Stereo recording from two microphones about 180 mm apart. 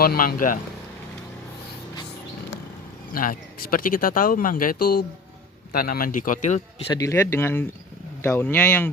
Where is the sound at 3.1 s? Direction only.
50° left (ahead or behind).